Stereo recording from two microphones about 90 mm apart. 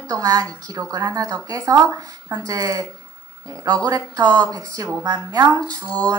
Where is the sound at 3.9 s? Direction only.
45° right (ahead or behind).